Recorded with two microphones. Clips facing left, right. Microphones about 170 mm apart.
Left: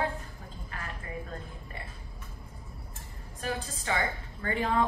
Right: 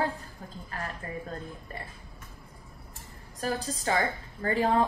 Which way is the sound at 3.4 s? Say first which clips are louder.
Right 4 dB; 35° right (ahead or behind).